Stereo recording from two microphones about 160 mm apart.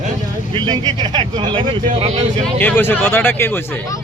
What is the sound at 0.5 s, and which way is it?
Speech, 25° right (ahead or behind).